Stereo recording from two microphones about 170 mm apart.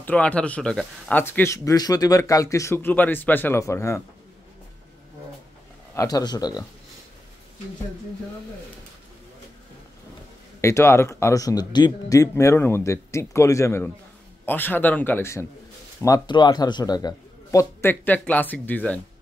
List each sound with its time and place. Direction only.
0.0 s speech: 10° left (ahead or behind)
5.9 s a man's voice: 20° left (ahead or behind)
10.6 s a man's voice: 15° left (ahead or behind)